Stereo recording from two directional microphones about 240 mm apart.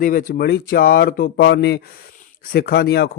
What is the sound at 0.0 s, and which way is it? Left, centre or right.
A man's voice, left.